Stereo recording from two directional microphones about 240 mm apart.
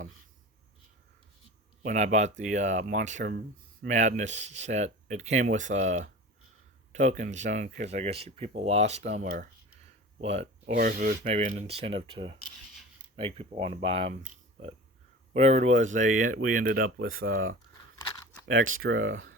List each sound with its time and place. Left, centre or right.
1.8 s speech: right
9.3 s a sound: right
10.2 s speech: right
10.8 s speech: right
18.5 s speech: right